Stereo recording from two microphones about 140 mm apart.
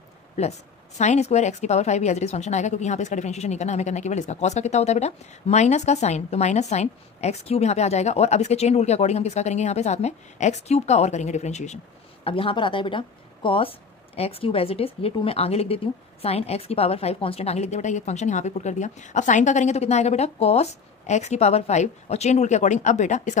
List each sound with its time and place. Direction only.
0.4 s speech: 55° left (ahead or behind)
12.3 s a woman's voice: 40° left (ahead or behind); by 23.3 s 60° left (ahead or behind)